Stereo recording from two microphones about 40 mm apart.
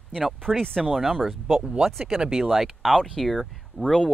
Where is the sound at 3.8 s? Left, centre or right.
Left.